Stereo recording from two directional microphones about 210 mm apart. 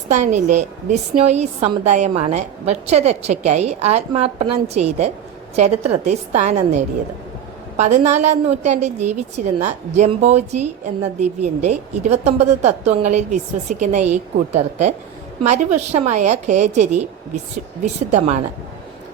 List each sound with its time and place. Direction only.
0.1 s a woman's voice: 35° right (ahead or behind)